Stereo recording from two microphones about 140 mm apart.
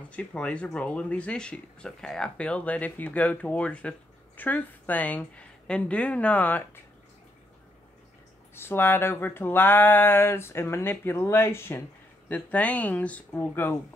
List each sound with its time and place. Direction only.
0.1 s speech: 10° left (ahead or behind)
8.5 s speech: 15° left (ahead or behind)